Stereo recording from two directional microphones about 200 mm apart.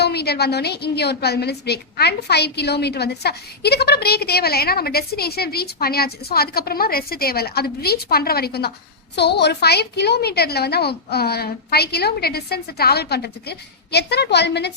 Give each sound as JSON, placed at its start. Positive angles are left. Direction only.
{"t": 0.0, "sound": "a woman's voice", "side_deg": 55}